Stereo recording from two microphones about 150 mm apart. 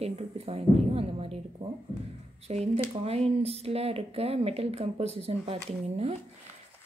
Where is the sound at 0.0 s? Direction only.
40° right (ahead or behind).